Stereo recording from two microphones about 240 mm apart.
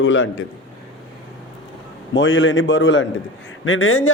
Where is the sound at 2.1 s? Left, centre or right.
Left.